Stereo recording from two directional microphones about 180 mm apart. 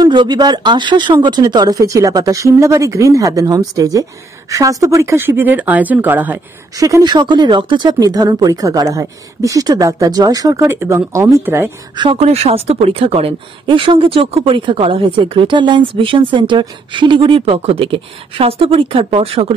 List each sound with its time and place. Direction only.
0.0 s speech: 25° right (ahead or behind)
12.0 s speech: 30° right (ahead or behind)